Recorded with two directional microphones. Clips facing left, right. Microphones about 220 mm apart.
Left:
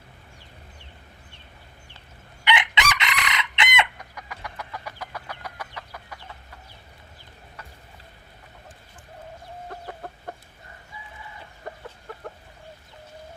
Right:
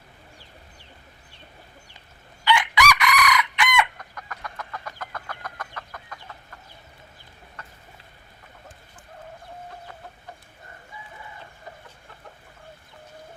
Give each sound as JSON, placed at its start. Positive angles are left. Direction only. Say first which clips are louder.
{"t": 2.4, "sound": "chicken", "louder": "right 3 dB", "side_deg": 20}
{"t": 3.9, "sound": "chicken", "louder": "even", "side_deg": 10}
{"t": 10.0, "sound": "chicken", "louder": "left 6 dB", "side_deg": 55}
{"t": 11.6, "sound": "chicken", "louder": "left 7 dB", "side_deg": 55}